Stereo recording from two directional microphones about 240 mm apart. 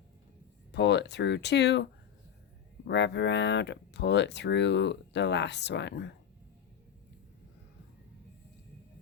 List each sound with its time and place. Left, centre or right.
0.7 s speech: left